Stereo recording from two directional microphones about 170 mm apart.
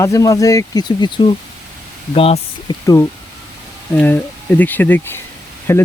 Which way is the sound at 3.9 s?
10° left (ahead or behind).